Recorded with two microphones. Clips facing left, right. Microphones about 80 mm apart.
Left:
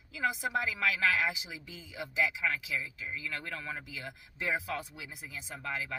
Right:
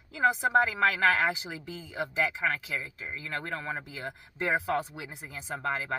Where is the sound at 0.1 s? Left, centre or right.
Right.